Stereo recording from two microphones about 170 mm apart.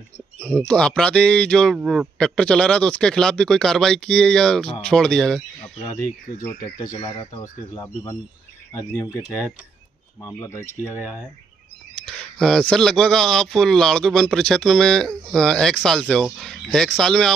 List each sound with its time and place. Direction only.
0.4 s a man's voice: 10° left (ahead or behind)
5.8 s a man's voice: 25° left (ahead or behind)
11.9 s speech: 5° left (ahead or behind)